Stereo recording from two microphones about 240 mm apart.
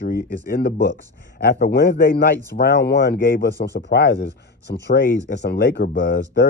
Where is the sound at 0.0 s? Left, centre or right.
Left.